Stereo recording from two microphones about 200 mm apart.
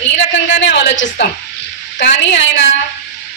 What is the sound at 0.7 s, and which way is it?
A woman's voice, 60° left (ahead or behind).